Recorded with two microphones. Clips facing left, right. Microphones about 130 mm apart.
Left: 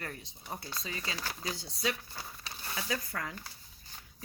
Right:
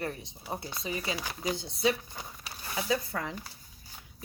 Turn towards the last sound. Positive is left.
turn(degrees=-20)  # may be behind; listen again after turning